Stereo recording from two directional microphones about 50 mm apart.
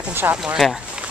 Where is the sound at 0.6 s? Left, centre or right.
Centre.